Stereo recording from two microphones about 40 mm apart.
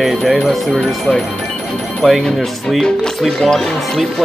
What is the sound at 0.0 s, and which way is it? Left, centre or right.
Speech, centre.